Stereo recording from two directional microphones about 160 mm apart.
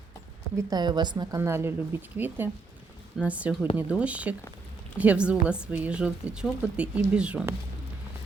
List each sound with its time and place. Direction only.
0.7 s a woman's voice: 25° right (ahead or behind)
1.4 s speech: 15° right (ahead or behind)